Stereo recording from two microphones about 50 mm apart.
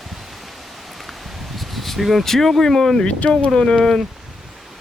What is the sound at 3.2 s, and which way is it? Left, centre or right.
Speech, left.